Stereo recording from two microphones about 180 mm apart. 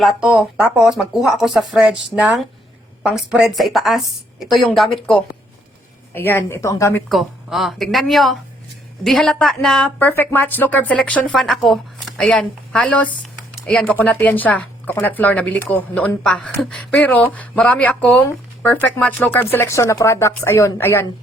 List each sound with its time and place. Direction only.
0.0 s speech: 5° right (ahead or behind)
2.1 s speech: 20° left (ahead or behind)
3.0 s speech: 5° right (ahead or behind)
6.1 s speech: 10° left (ahead or behind)
7.1 s speech: centre (ahead or behind)